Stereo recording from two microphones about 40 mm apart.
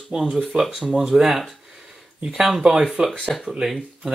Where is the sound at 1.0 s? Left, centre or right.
Centre.